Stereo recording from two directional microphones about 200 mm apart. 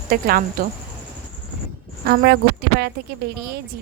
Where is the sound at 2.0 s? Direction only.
50° right (ahead or behind).